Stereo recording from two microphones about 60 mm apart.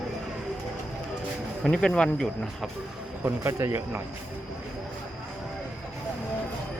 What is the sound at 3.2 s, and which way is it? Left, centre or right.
Speech, right.